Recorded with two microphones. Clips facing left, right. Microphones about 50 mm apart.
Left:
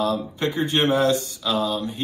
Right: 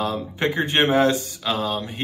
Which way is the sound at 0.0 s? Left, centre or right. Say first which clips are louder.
Even; right.